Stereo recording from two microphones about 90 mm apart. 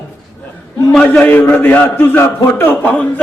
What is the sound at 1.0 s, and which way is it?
A man's voice, 15° left (ahead or behind).